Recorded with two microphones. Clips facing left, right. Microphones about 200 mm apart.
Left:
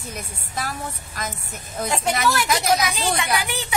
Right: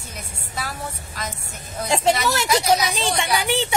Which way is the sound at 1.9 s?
25° right (ahead or behind).